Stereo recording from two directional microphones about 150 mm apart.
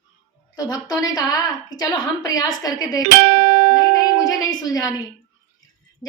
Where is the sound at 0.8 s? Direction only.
25° left (ahead or behind).